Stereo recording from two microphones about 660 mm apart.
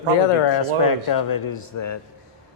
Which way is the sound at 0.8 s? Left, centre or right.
Left.